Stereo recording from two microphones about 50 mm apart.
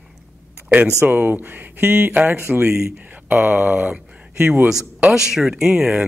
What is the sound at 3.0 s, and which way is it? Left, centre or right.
Speech, right.